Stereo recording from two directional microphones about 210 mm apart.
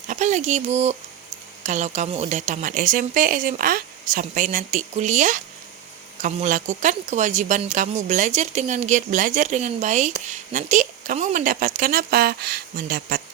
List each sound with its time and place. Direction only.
0.1 s speech: 35° right (ahead or behind)